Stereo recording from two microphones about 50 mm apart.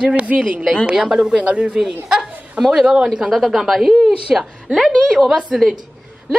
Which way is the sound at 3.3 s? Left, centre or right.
Centre.